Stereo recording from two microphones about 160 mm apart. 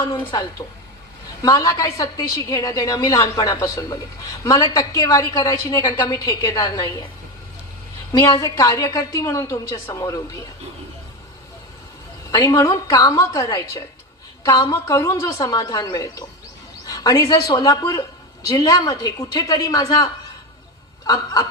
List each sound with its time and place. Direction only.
0.0 s a woman's voice: 20° left (ahead or behind)
8.1 s a woman's voice: 20° left (ahead or behind)
12.3 s a woman's voice: 20° left (ahead or behind)